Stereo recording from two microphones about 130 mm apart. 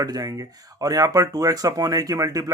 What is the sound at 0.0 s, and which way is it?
Speech, 25° right (ahead or behind).